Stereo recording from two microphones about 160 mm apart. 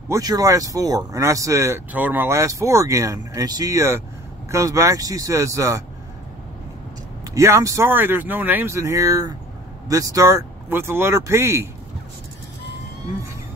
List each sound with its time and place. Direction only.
0.1 s speech: 20° right (ahead or behind)
7.3 s speech: 15° right (ahead or behind)